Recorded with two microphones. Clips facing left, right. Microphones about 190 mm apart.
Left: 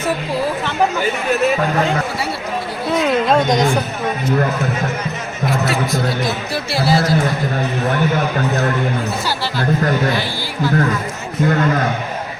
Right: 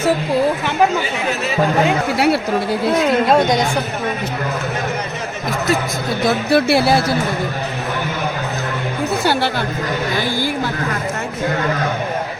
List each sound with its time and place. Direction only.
2.1 s speech: 70° right (ahead or behind)
6.2 s speech: 60° right (ahead or behind)